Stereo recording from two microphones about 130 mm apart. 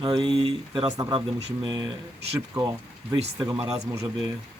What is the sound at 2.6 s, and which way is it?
A man's voice, 25° right (ahead or behind).